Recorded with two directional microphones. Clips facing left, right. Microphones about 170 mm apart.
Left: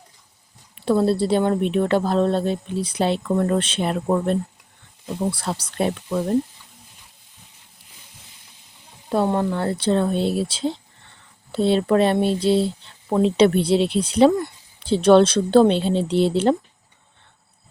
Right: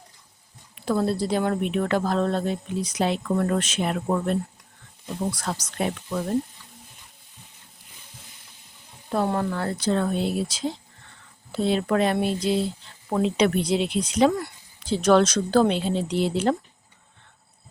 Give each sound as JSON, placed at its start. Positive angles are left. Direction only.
{"t": 0.9, "sound": "speech", "side_deg": 30}
{"t": 9.1, "sound": "speech", "side_deg": 25}